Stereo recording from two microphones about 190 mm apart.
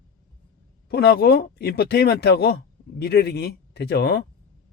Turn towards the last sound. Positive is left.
turn(degrees=60)  # may be behind; listen again after turning